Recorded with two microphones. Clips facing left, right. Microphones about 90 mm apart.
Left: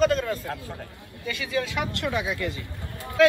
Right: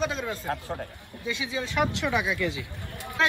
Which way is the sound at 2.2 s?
55° left (ahead or behind).